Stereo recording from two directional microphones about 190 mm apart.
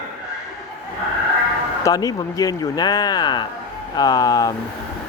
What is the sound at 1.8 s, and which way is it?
Speech, 20° left (ahead or behind).